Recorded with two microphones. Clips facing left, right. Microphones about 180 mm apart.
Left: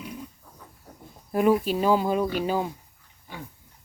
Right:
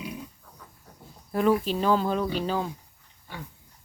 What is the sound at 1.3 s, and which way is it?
Speech, 15° left (ahead or behind).